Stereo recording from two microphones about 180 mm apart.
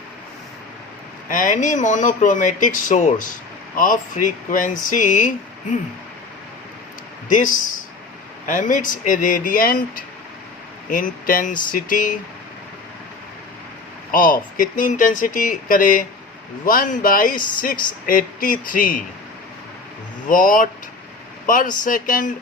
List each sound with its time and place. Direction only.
1.3 s speech: 45° left (ahead or behind)
7.3 s speech: 45° left (ahead or behind)
14.1 s speech: 50° left (ahead or behind)
20.2 s speech: 50° left (ahead or behind)